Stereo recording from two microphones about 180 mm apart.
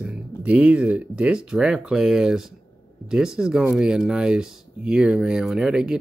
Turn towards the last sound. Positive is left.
turn(degrees=-5)  # may be behind; listen again after turning